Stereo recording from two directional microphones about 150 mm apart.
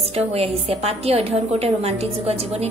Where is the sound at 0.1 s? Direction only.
40° right (ahead or behind).